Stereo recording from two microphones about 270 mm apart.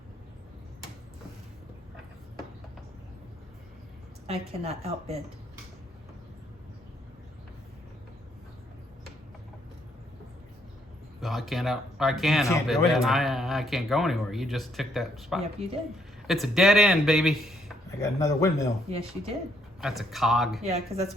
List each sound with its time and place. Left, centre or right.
4.3 s a woman's voice: right
11.2 s speech: centre
18.0 s speech: centre
18.9 s a woman's voice: right
19.8 s speech: centre
20.7 s a woman's voice: right